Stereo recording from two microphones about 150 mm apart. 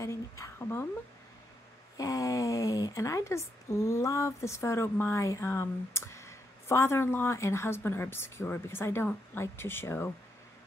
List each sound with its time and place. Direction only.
0.0 s a woman's voice: 20° left (ahead or behind)
2.0 s speech: 20° left (ahead or behind)